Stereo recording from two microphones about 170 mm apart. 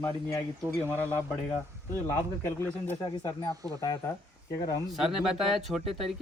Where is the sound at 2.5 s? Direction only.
15° left (ahead or behind).